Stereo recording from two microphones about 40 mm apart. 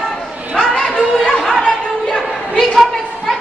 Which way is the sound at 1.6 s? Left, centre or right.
Centre.